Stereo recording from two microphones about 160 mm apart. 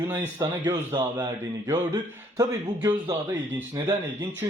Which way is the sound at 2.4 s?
20° right (ahead or behind).